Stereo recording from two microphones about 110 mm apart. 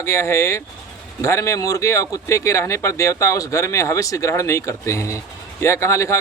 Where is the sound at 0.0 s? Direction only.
25° left (ahead or behind).